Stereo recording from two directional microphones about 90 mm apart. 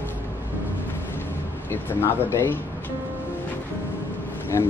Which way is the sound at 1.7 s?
25° left (ahead or behind).